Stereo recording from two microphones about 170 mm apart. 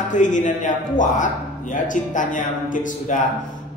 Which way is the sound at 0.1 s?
45° left (ahead or behind).